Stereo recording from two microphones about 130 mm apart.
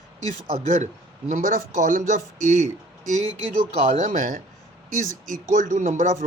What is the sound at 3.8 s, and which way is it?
Speech, 90° right.